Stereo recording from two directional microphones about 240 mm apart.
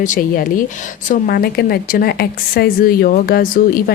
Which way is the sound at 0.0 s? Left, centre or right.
Left.